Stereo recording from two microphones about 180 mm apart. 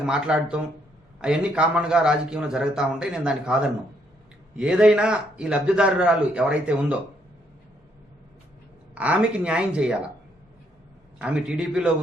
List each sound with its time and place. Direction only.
0.0 s a man's voice: 5° right (ahead or behind)
9.0 s a man's voice: 5° right (ahead or behind)
11.2 s a man's voice: 5° right (ahead or behind)